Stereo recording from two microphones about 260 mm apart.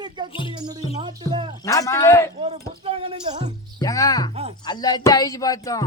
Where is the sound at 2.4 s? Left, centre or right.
Right.